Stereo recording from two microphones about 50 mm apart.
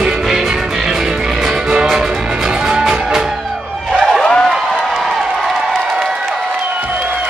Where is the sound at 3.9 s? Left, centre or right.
Centre.